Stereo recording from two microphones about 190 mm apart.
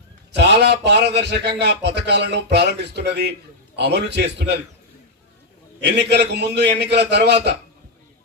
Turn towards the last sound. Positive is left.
turn(degrees=-60)  # may be behind; listen again after turning